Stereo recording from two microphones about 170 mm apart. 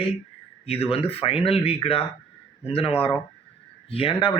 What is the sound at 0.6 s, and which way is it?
A man's voice, 35° left (ahead or behind).